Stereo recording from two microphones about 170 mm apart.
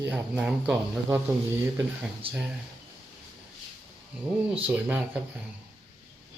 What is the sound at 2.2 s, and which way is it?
Speech, 30° right (ahead or behind).